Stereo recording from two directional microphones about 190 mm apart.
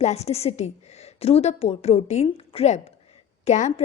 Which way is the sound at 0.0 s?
35° left (ahead or behind).